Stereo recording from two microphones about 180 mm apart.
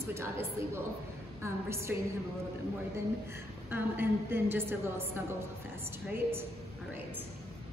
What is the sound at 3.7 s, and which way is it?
A woman's voice, 10° right (ahead or behind).